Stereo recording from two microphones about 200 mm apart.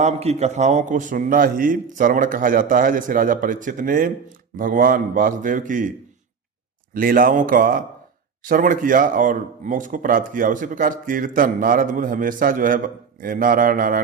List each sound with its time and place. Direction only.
0.0 s a man's voice: 30° right (ahead or behind)
6.9 s speech: 45° right (ahead or behind)